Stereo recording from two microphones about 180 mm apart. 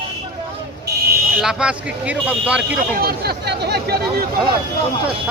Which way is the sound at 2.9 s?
60° right (ahead or behind).